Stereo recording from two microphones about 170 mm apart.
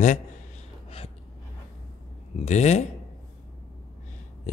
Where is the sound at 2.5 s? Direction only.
40° left (ahead or behind).